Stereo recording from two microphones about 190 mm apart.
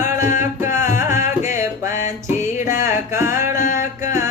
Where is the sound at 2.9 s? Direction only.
15° right (ahead or behind).